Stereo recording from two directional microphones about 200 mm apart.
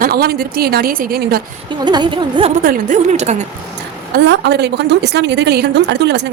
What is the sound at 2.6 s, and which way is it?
Speech, 40° right (ahead or behind).